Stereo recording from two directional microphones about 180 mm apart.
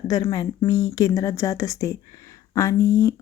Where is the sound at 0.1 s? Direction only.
20° left (ahead or behind).